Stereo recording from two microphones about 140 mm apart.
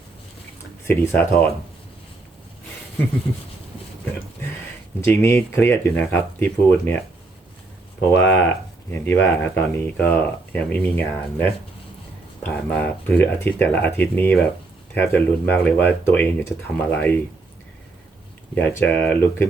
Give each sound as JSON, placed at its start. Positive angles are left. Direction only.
{"t": 0.9, "sound": "speech", "side_deg": 15}
{"t": 4.9, "sound": "speech", "side_deg": 20}
{"t": 8.1, "sound": "speech", "side_deg": 15}
{"t": 12.4, "sound": "speech", "side_deg": 10}
{"t": 18.5, "sound": "speech", "side_deg": 15}